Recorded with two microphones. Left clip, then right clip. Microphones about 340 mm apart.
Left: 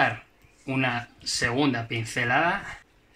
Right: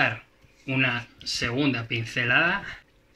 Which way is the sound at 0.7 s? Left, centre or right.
Centre.